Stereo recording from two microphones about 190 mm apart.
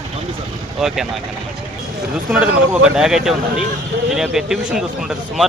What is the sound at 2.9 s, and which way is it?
Speech, 5° right (ahead or behind).